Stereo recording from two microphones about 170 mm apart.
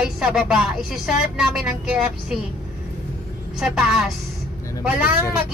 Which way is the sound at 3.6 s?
5° right (ahead or behind).